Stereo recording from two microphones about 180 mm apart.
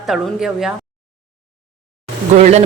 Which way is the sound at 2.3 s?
35° right (ahead or behind).